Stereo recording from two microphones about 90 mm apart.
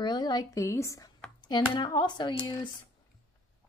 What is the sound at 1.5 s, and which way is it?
Speech, 50° left (ahead or behind).